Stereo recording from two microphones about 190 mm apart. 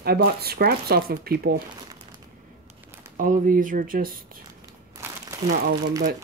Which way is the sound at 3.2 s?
45° right (ahead or behind).